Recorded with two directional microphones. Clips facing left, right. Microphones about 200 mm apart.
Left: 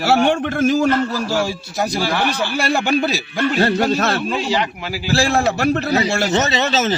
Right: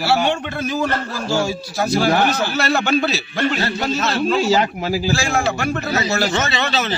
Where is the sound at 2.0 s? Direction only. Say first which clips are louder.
Right 5 dB; 45° right (ahead or behind).